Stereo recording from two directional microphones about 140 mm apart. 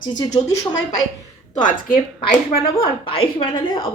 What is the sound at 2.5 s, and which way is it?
Speech, 45° left (ahead or behind).